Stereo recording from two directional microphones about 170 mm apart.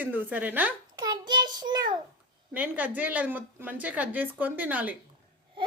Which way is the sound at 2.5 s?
10° right (ahead or behind).